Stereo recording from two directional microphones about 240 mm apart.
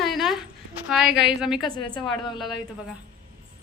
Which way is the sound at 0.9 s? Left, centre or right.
Centre.